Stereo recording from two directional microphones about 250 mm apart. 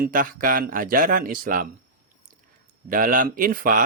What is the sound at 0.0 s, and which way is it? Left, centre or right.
Speech, right.